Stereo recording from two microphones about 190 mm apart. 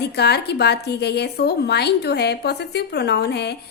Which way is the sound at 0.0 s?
60° left (ahead or behind).